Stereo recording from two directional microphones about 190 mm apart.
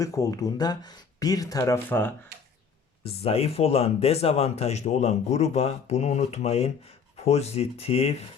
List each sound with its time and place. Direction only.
0.0 s speech: 15° left (ahead or behind)
3.0 s speech: 30° left (ahead or behind)